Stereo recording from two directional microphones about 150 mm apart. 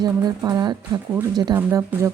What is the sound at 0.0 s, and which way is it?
Speech, 25° right (ahead or behind).